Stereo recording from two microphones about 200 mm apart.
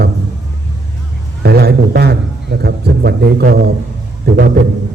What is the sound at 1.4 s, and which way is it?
A man's voice, 55° right (ahead or behind).